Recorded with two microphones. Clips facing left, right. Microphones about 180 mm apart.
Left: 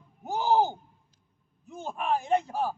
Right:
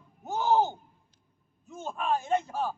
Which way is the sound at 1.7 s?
15° left (ahead or behind).